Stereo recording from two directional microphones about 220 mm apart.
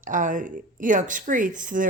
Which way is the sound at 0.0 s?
35° right (ahead or behind).